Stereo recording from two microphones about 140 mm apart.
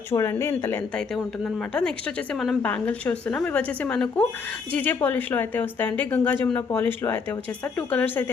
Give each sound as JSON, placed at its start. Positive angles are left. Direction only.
{"t": 0.1, "sound": "speech", "side_deg": 20}
{"t": 0.9, "sound": "speech", "side_deg": 5}